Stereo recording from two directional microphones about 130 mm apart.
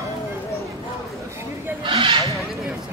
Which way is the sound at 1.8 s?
45° right (ahead or behind).